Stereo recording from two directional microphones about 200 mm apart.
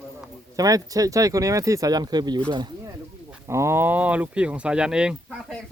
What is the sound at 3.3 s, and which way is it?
Speech, 15° right (ahead or behind).